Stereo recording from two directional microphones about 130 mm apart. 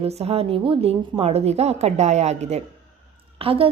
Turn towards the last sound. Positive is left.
turn(degrees=-45)  # may be behind; listen again after turning